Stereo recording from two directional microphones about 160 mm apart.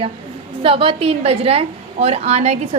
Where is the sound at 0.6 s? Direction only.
35° right (ahead or behind).